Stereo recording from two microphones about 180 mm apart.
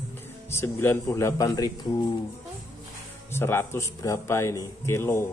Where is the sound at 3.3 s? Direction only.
15° left (ahead or behind).